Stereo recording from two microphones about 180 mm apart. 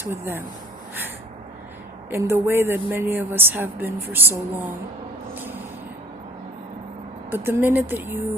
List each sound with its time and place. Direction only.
0.0 s a woman's voice: 10° right (ahead or behind)
2.0 s a woman's voice: 15° right (ahead or behind)
5.3 s a sound: 10° right (ahead or behind)
7.3 s a woman's voice: 10° right (ahead or behind)